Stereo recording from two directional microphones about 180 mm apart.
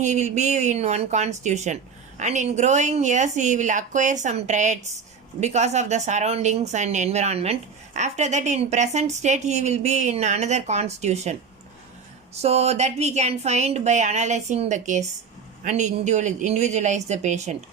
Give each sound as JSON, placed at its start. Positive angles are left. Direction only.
{"t": 0.0, "sound": "a woman's voice", "side_deg": -40}